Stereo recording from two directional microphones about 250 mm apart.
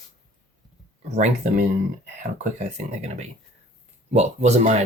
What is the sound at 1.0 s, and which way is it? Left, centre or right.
Speech, right.